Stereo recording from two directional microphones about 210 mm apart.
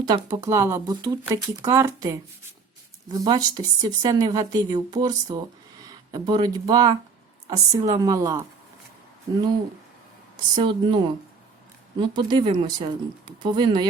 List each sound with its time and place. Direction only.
0.3 s speech: 10° right (ahead or behind)
10.5 s speech: 20° right (ahead or behind)